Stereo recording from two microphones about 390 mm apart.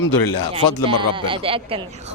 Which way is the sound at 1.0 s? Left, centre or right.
Centre.